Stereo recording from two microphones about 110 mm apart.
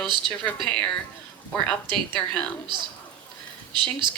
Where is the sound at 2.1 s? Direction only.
10° left (ahead or behind).